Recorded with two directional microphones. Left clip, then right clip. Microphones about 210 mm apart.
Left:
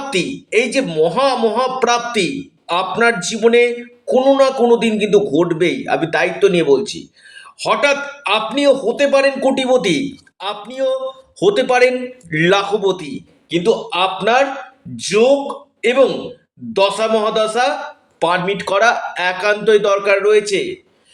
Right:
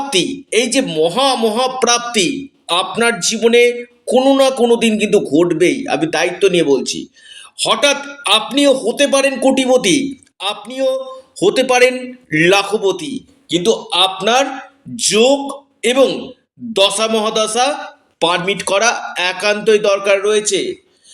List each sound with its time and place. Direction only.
0.2 s a man's voice: 40° right (ahead or behind)